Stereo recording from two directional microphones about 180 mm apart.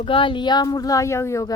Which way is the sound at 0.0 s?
30° left (ahead or behind).